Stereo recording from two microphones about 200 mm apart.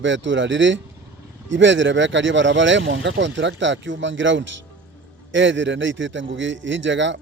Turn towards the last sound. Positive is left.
turn(degrees=-65)  # may be behind; listen again after turning